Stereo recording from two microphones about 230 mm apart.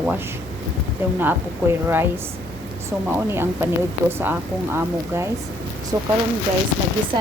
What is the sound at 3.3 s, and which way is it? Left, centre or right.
A woman's voice, centre.